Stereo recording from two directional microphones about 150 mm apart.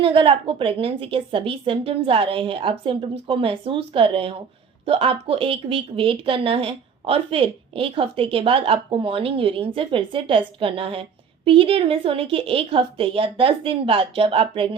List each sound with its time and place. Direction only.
0.0 s a woman's voice: 35° right (ahead or behind)